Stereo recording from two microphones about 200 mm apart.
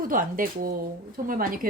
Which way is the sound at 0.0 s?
45° right (ahead or behind).